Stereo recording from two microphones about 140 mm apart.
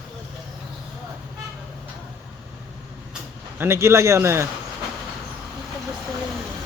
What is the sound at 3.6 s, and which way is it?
Speech, 20° right (ahead or behind).